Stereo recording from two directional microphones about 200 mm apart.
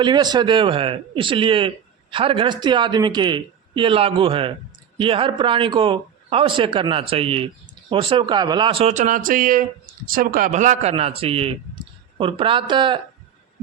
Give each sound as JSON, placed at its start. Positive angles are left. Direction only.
{"t": 0.0, "sound": "a man's voice", "side_deg": -20}